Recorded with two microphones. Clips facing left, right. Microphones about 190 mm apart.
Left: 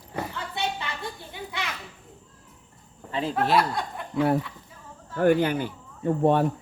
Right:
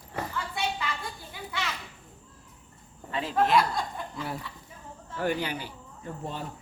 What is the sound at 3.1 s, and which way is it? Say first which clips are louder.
Speech: left 1 dB; 30° left (ahead or behind).